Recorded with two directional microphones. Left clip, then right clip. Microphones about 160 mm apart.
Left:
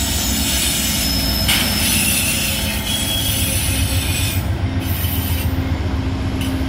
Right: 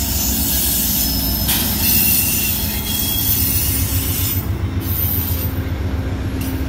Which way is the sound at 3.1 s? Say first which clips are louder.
Left 3 dB; 25° left (ahead or behind).